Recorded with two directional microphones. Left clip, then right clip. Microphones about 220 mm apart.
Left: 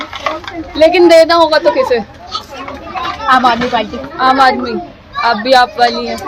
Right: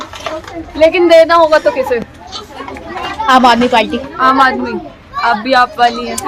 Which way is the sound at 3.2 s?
55° right (ahead or behind).